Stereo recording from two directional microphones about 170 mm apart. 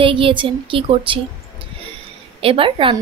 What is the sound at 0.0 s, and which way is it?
A woman's voice, 30° right (ahead or behind).